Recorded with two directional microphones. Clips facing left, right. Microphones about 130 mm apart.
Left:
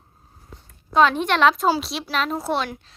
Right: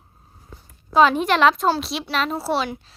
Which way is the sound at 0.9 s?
5° right (ahead or behind).